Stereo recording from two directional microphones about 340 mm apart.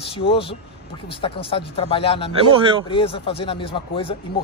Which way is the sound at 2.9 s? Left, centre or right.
Centre.